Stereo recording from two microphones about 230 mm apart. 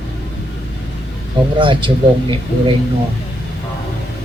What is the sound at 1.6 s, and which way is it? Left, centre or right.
Speech, right.